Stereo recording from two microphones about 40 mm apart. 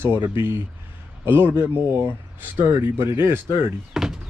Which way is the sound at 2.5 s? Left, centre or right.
Right.